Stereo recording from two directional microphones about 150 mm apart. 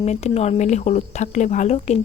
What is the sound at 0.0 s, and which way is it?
Speech, 45° left (ahead or behind).